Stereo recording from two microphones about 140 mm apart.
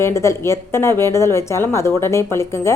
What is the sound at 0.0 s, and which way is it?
A woman's voice, 20° left (ahead or behind).